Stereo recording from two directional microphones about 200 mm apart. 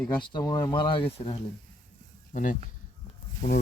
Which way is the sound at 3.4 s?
40° left (ahead or behind).